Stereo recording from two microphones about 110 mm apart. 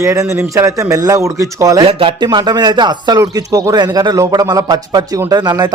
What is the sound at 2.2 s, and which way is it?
Speech, 45° right (ahead or behind).